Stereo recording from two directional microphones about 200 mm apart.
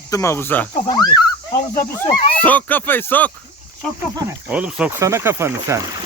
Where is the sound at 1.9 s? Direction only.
10° left (ahead or behind).